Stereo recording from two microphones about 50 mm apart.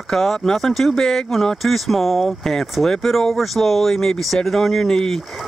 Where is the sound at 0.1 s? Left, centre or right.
Centre.